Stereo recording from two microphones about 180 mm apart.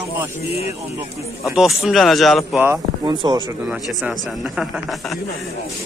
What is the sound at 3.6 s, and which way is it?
Speech, 5° right (ahead or behind).